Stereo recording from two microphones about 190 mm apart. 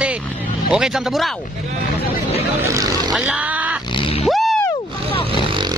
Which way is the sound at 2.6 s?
15° right (ahead or behind).